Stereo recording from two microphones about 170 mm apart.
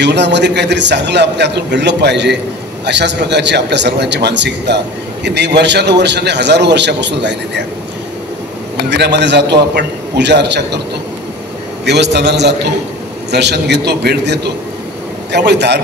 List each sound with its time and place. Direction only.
0.0 s a man's voice: 90° right
8.9 s a man's voice: 90° right
11.8 s a man's voice: 85° right